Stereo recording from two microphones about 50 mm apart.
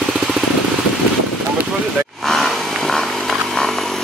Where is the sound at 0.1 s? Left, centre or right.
Centre.